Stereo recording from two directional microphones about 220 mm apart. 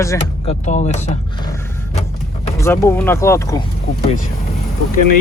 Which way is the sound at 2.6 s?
10° left (ahead or behind).